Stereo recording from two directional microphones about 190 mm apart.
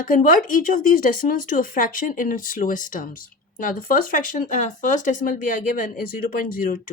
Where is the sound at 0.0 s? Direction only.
45° left (ahead or behind).